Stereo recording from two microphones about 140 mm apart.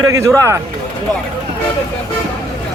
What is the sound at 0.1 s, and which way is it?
Speech, 20° right (ahead or behind).